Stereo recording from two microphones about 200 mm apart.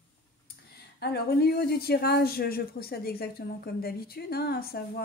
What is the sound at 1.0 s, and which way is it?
Speech, 55° left (ahead or behind).